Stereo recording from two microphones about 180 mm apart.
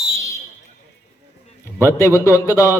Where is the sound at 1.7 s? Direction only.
15° left (ahead or behind).